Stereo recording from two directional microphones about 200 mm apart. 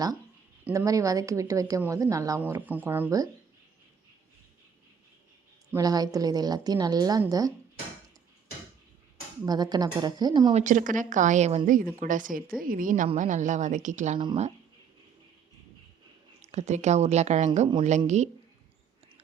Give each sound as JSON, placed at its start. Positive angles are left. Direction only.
{"t": 0.6, "sound": "a woman's voice", "side_deg": -10}
{"t": 5.7, "sound": "a woman's voice", "side_deg": -20}
{"t": 9.5, "sound": "a woman's voice", "side_deg": -20}
{"t": 10.5, "sound": "a woman's voice", "side_deg": -40}
{"t": 16.4, "sound": "a woman's voice", "side_deg": -35}